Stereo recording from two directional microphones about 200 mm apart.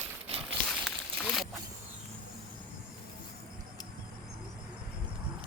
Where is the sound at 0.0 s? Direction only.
30° right (ahead or behind).